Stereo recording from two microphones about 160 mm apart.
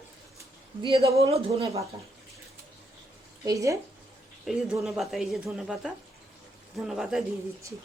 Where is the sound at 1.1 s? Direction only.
40° right (ahead or behind).